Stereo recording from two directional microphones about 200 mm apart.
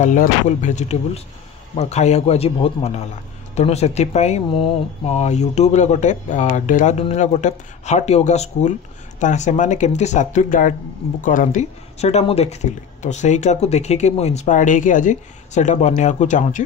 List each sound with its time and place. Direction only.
0.0 s speech: 40° left (ahead or behind)